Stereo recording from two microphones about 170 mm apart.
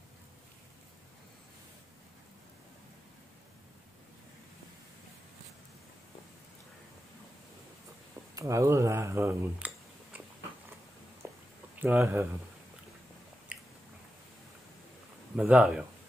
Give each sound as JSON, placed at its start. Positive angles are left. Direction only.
{"t": 8.4, "sound": "speech", "side_deg": -20}
{"t": 10.1, "sound": "biting", "side_deg": -10}
{"t": 11.2, "sound": "a sound", "side_deg": -15}
{"t": 11.8, "sound": "speech", "side_deg": -10}
{"t": 13.5, "sound": "chewing", "side_deg": -5}
{"t": 15.3, "sound": "speech", "side_deg": -5}